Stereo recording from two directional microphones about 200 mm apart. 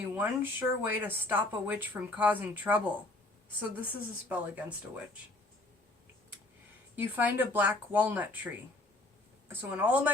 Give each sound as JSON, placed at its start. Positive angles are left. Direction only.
{"t": 0.2, "sound": "speech", "side_deg": -10}
{"t": 6.9, "sound": "speech", "side_deg": -10}
{"t": 9.5, "sound": "speech", "side_deg": -10}